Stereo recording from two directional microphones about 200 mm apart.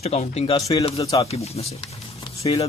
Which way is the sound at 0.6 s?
20° left (ahead or behind).